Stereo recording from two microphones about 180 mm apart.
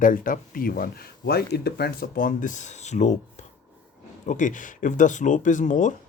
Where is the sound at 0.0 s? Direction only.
50° left (ahead or behind).